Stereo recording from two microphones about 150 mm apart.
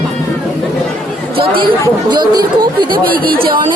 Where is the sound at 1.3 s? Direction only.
35° right (ahead or behind).